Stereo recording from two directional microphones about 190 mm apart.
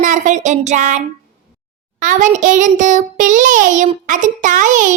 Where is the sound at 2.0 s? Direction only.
40° right (ahead or behind).